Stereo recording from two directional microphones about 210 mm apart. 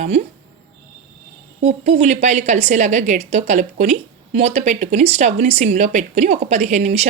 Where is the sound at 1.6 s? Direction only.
35° right (ahead or behind).